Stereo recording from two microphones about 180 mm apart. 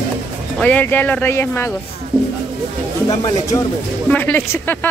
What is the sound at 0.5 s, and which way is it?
Speech, 10° left (ahead or behind).